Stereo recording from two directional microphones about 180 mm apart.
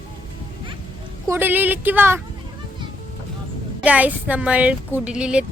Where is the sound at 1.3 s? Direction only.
10° right (ahead or behind).